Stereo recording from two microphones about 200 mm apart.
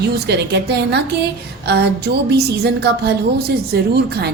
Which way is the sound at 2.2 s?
55° right (ahead or behind).